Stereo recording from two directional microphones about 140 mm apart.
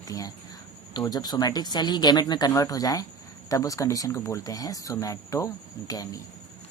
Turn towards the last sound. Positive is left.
turn(degrees=25)  # may be behind; listen again after turning